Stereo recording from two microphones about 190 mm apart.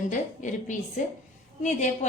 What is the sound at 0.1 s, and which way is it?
A woman's voice, 40° left (ahead or behind).